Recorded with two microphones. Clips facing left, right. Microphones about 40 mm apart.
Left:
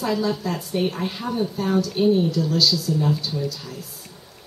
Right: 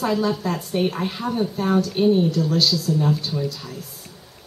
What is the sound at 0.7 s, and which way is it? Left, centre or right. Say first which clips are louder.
A woman's voice: right 1 dB; centre.